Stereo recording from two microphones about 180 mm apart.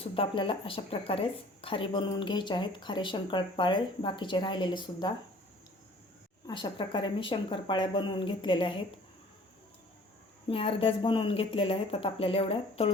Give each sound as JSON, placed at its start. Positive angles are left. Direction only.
{"t": 0.0, "sound": "a woman's voice", "side_deg": 30}
{"t": 6.5, "sound": "a woman's voice", "side_deg": 25}
{"t": 10.5, "sound": "speech", "side_deg": 30}